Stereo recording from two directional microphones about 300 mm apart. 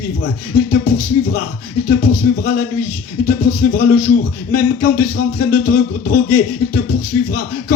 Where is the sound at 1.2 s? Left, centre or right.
Left.